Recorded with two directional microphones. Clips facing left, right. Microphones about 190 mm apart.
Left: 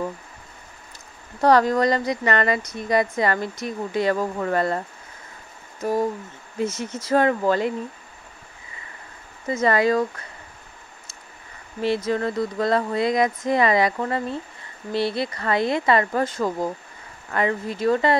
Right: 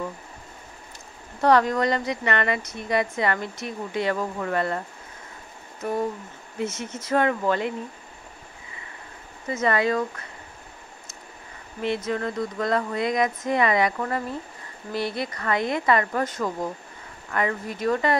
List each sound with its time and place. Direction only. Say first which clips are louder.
1.4 s speech: left 2 dB; 35° left (ahead or behind)
6.6 s speech: left 3 dB; 35° left (ahead or behind)
9.5 s speech: left 3 dB; 35° left (ahead or behind)
11.8 s speech: left 4 dB; 35° left (ahead or behind)